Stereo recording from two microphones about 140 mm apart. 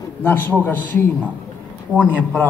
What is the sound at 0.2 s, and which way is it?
Speech, 15° left (ahead or behind).